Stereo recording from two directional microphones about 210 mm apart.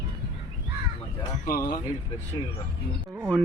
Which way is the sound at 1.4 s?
45° left (ahead or behind).